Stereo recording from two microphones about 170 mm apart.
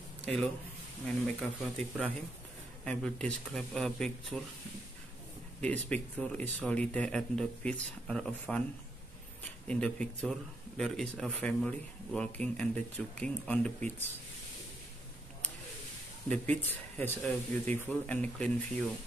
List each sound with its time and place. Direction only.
0.2 s speech: 5° left (ahead or behind)
5.6 s speech: 5° left (ahead or behind)
9.7 s speech: 5° left (ahead or behind)
16.3 s speech: 10° left (ahead or behind)